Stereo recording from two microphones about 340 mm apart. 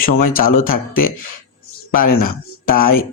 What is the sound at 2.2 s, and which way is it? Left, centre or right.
Speech, left.